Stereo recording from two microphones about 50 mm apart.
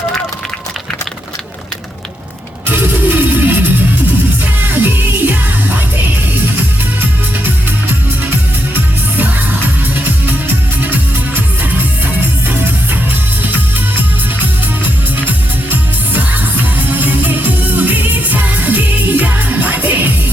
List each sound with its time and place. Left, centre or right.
2.6 s music: right
8.7 s music: right
15.3 s music: right